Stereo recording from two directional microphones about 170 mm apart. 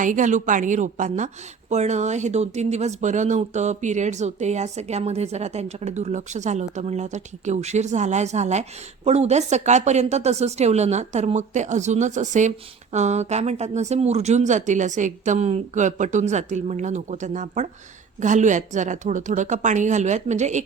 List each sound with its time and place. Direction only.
0.0 s speech: 50° right (ahead or behind)